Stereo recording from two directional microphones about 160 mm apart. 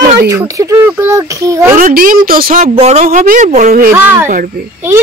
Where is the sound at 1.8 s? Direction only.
60° right (ahead or behind).